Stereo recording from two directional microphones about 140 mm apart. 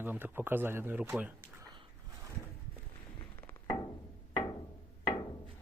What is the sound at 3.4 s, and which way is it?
Thunk, 15° left (ahead or behind).